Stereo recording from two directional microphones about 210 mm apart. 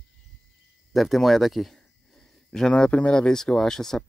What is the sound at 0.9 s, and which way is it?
Speech, centre (ahead or behind).